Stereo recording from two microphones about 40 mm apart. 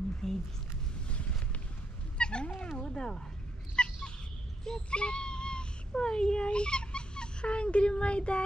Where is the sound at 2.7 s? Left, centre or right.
Left.